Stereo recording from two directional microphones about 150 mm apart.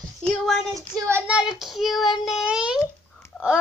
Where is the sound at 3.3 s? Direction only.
5° left (ahead or behind).